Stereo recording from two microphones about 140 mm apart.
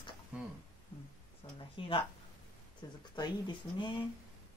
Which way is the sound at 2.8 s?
30° left (ahead or behind).